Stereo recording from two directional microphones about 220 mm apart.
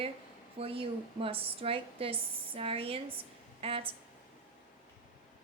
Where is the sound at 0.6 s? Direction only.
25° right (ahead or behind).